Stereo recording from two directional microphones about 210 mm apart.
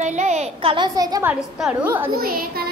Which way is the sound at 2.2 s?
45° right (ahead or behind).